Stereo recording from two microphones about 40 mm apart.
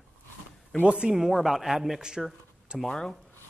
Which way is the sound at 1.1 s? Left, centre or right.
Centre.